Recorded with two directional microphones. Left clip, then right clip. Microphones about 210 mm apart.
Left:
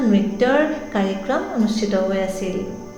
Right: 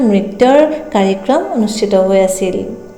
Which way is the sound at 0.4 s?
30° right (ahead or behind).